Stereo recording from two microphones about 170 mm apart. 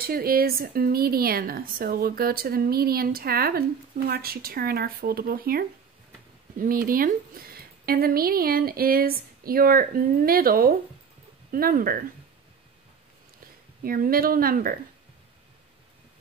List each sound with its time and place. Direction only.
0.0 s a woman's voice: 60° right (ahead or behind)
13.8 s a woman's voice: 60° right (ahead or behind)